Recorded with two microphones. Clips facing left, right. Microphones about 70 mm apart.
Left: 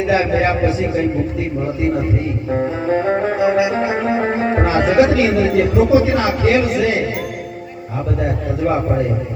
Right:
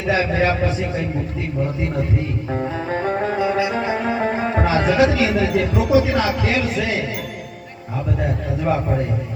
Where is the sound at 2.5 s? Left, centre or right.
Left.